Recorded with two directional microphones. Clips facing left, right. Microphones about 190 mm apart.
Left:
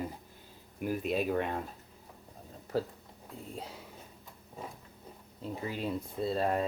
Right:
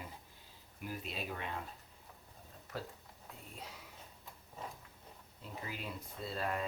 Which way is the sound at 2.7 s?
30° left (ahead or behind).